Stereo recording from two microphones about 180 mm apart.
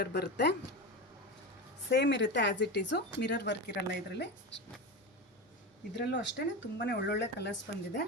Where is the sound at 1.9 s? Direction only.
75° left (ahead or behind).